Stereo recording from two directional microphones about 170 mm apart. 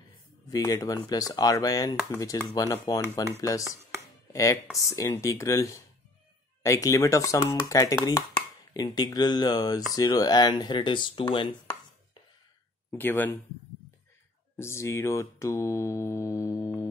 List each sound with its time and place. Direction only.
0.5 s speech: 20° left (ahead or behind)
4.9 s mantra: 15° left (ahead or behind)
6.6 s speech: 15° left (ahead or behind)
12.9 s mantra: 10° left (ahead or behind)
14.6 s mantra: 15° left (ahead or behind)